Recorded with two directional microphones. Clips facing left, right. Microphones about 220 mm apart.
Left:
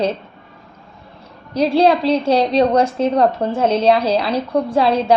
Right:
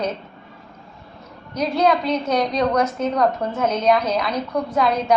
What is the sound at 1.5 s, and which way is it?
A woman's voice, 30° left (ahead or behind).